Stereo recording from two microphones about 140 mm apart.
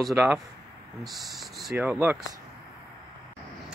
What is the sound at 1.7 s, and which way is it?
Speech, 10° right (ahead or behind).